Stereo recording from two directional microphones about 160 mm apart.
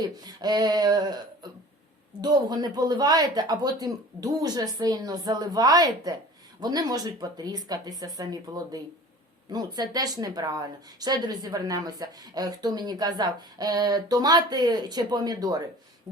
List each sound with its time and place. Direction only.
0.3 s speech: 25° right (ahead or behind)